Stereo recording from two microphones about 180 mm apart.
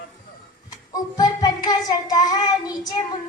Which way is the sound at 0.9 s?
20° left (ahead or behind).